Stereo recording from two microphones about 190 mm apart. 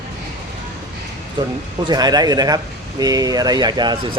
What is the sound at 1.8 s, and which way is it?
Speech, 20° right (ahead or behind).